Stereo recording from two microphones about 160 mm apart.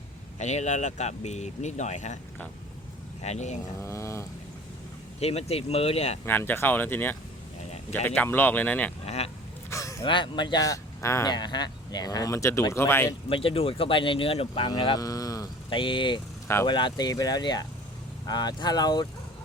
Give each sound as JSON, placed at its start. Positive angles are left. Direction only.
{"t": 0.3, "sound": "speech", "side_deg": 45}
{"t": 3.2, "sound": "speech", "side_deg": 45}
{"t": 3.8, "sound": "speech", "side_deg": 15}
{"t": 5.2, "sound": "speech", "side_deg": 40}
{"t": 6.2, "sound": "speech", "side_deg": 15}
{"t": 7.7, "sound": "a sound", "side_deg": 45}
{"t": 8.0, "sound": "speech", "side_deg": 10}
{"t": 9.0, "sound": "a sound", "side_deg": 40}
{"t": 9.6, "sound": "a sound", "side_deg": 20}
{"t": 10.0, "sound": "speech", "side_deg": 30}
{"t": 13.2, "sound": "speech", "side_deg": 35}